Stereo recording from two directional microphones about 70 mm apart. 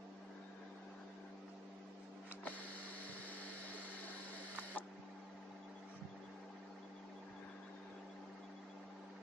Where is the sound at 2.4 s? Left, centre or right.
Left.